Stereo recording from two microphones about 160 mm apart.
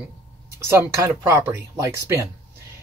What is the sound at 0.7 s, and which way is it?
Speech, 15° right (ahead or behind).